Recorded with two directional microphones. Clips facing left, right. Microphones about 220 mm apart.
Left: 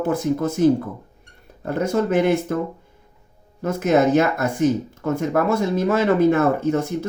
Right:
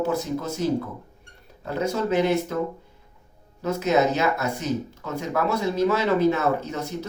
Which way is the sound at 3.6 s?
50° left (ahead or behind).